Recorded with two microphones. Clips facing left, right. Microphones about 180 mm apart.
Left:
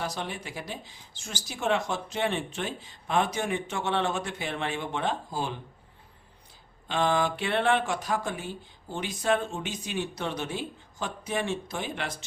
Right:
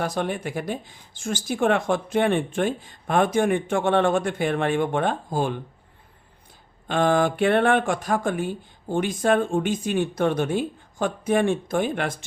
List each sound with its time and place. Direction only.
0.0 s speech: 55° right (ahead or behind)
6.8 s speech: 50° right (ahead or behind)